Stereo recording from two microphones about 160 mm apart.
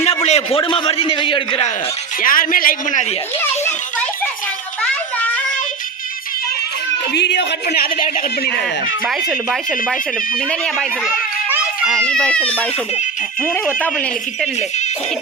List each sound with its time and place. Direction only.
0.3 s a man's voice: 40° left (ahead or behind)
2.2 s a man's voice: 60° left (ahead or behind)
7.1 s speech: 90° left; by 8.2 s 60° left (ahead or behind)
9.0 s speech: centre (ahead or behind)
11.4 s children playing: 10° right (ahead or behind)
11.9 s a child's voice: 5° left (ahead or behind)